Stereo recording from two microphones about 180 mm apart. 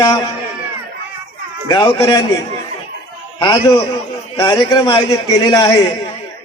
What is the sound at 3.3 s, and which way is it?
A man's voice, 25° left (ahead or behind).